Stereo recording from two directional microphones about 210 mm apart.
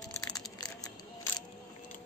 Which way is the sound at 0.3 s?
15° left (ahead or behind).